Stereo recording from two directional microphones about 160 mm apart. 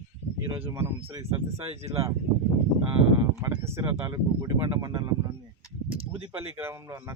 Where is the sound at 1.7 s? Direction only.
40° right (ahead or behind).